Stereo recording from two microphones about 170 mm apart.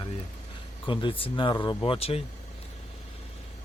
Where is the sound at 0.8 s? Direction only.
30° left (ahead or behind).